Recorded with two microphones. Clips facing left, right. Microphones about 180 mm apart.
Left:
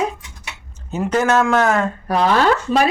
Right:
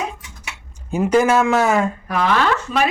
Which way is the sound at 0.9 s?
10° right (ahead or behind).